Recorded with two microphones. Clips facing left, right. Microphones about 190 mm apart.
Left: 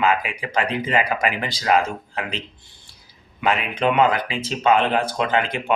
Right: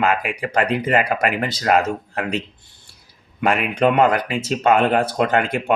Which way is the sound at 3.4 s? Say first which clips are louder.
Right 4 dB; 50° right (ahead or behind).